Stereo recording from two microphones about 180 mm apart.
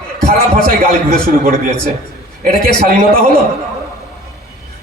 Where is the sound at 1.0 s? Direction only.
55° right (ahead or behind).